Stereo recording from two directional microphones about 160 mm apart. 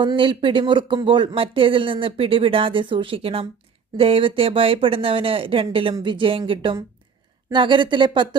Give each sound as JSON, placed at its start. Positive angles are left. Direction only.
{"t": 0.0, "sound": "speech", "side_deg": -30}